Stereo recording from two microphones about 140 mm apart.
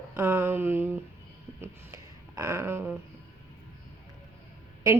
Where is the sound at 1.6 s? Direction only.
20° right (ahead or behind).